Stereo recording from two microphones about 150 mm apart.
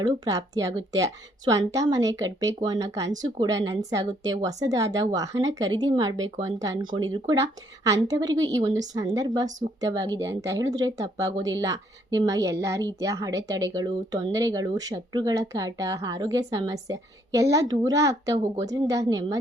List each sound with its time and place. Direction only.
0.0 s speech: 25° right (ahead or behind)